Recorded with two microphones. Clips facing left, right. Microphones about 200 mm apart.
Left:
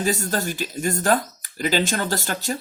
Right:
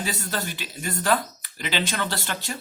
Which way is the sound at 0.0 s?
45° left (ahead or behind).